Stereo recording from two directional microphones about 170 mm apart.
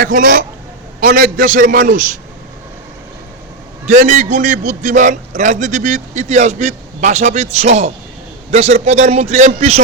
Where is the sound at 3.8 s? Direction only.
45° right (ahead or behind).